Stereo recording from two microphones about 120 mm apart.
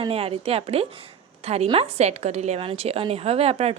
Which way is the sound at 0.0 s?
55° right (ahead or behind).